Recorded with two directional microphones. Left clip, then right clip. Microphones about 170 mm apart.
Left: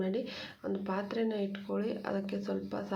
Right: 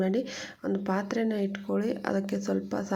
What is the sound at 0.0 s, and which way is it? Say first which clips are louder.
Speech: right 6 dB; 40° right (ahead or behind).